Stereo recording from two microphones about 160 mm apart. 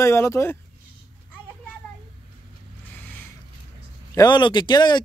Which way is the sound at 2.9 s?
10° left (ahead or behind).